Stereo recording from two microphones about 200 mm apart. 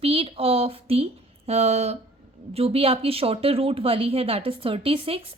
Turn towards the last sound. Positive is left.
turn(degrees=-30)  # may be behind; listen again after turning